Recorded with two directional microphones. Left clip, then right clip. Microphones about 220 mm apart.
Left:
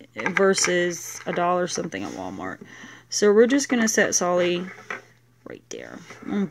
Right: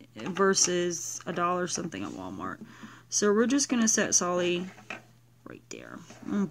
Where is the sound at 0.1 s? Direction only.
10° right (ahead or behind).